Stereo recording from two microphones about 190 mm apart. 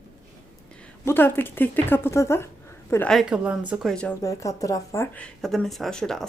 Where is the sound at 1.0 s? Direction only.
10° left (ahead or behind).